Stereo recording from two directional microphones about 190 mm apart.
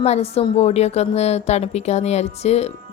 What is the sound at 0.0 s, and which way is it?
A woman's voice, 35° left (ahead or behind).